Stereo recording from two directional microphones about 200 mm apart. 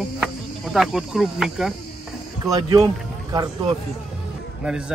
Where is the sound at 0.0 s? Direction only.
Centre (ahead or behind).